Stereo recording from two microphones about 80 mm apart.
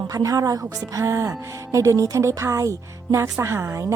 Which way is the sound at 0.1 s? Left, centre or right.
Right.